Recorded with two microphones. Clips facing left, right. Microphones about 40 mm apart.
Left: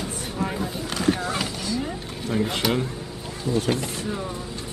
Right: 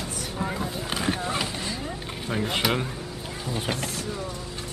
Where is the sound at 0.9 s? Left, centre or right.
Centre.